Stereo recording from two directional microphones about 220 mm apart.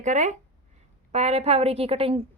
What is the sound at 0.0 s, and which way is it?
A woman's voice, 35° right (ahead or behind).